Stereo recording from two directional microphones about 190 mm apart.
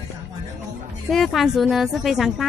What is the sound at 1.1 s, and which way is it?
Speech, centre (ahead or behind).